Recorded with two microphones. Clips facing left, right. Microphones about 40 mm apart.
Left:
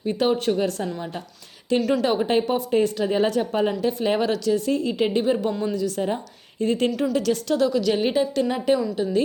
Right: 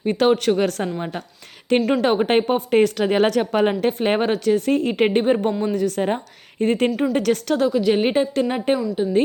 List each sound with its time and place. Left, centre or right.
0.0 s speech: right
2.0 s a woman's voice: right
2.6 s a woman's voice: right
5.5 s a woman's voice: right
5.7 s a woman's voice: right
7.6 s a woman's voice: right
8.0 s a woman's voice: right